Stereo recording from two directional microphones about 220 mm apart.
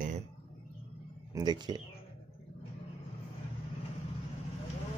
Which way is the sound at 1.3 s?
20° right (ahead or behind).